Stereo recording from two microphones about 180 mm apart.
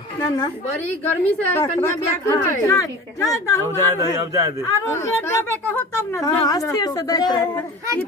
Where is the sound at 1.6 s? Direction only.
15° left (ahead or behind).